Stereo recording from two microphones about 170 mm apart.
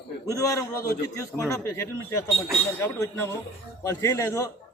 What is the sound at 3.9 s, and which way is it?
Speech, 15° left (ahead or behind).